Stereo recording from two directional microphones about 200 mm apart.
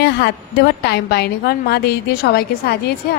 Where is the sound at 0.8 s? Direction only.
55° left (ahead or behind).